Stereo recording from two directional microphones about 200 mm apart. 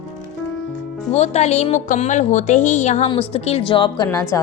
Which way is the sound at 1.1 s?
35° left (ahead or behind).